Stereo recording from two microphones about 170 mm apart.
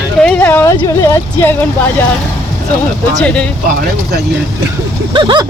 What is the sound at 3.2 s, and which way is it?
Speech, 5° left (ahead or behind).